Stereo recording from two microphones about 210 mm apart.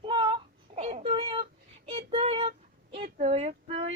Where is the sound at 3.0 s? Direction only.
30° right (ahead or behind).